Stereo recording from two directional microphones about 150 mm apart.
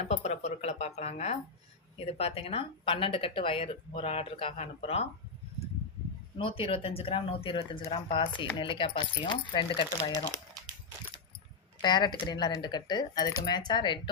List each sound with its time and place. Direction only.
0.0 s a sound: 45° left (ahead or behind)
2.0 s speech: 40° left (ahead or behind)
6.4 s speech: 40° left (ahead or behind)
11.8 s speech: 30° left (ahead or behind)